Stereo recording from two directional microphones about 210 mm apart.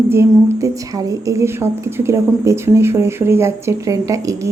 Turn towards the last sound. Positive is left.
turn(degrees=-15)  # may be behind; listen again after turning